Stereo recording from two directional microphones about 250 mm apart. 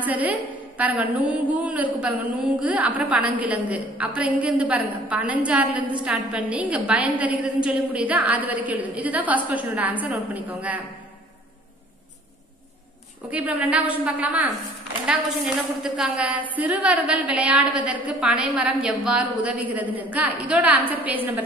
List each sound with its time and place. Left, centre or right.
0.0 s a woman's voice: centre
13.3 s a woman's voice: centre